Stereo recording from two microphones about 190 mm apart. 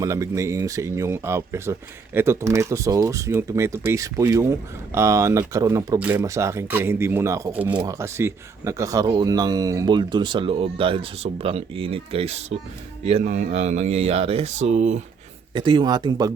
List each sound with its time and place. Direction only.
0.0 s speech: 15° right (ahead or behind); by 15.0 s 40° right (ahead or behind)
15.5 s speech: 25° right (ahead or behind)